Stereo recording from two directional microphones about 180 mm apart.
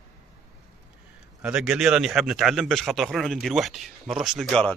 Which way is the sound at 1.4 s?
5° right (ahead or behind).